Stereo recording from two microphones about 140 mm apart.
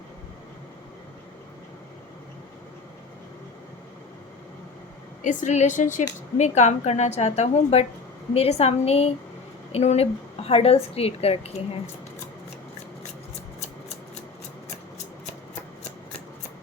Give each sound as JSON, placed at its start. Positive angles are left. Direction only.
{"t": 5.2, "sound": "a woman's voice", "side_deg": 65}